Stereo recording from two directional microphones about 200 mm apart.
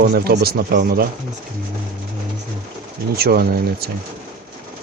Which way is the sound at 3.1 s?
50° right (ahead or behind).